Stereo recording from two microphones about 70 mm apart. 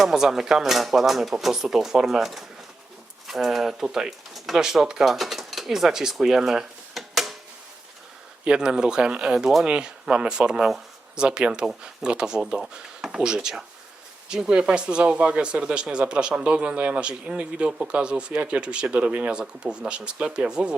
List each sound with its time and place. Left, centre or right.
0.0 s speech: centre
8.4 s speech: centre